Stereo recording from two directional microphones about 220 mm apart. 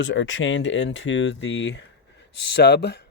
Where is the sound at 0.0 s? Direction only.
60° left (ahead or behind).